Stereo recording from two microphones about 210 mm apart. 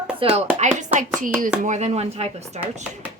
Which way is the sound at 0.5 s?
35° right (ahead or behind).